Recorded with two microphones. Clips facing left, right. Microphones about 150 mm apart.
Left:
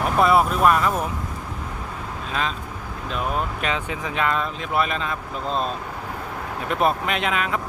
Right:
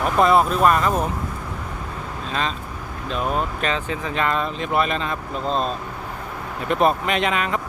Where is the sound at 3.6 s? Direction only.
10° left (ahead or behind).